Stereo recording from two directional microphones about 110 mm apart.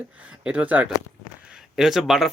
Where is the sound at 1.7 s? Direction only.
5° right (ahead or behind).